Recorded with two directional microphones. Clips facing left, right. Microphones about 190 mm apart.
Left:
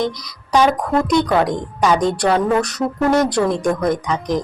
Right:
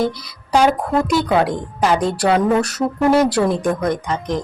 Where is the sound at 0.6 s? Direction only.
5° right (ahead or behind).